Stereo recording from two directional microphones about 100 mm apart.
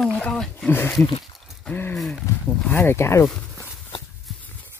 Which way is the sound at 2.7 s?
20° left (ahead or behind).